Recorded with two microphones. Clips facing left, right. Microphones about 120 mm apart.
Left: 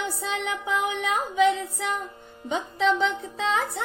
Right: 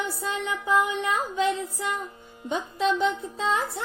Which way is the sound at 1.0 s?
85° left.